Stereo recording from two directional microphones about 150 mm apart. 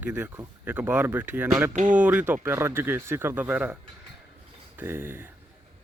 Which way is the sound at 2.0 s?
10° right (ahead or behind).